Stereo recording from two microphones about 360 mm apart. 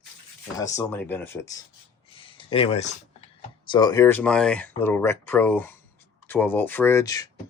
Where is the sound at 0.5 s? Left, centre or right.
Centre.